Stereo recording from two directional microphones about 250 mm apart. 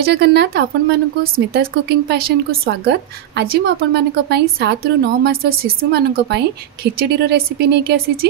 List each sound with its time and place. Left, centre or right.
0.0 s a woman's voice: right